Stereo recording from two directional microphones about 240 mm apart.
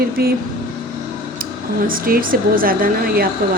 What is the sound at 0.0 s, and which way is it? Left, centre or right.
Speech, right.